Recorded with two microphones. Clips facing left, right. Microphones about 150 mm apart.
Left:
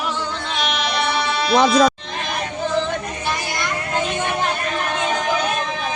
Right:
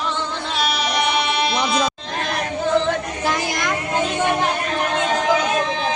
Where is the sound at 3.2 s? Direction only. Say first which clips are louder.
Right 3 dB; 90° right.